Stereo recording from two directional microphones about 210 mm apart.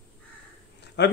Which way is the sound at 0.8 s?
55° left (ahead or behind).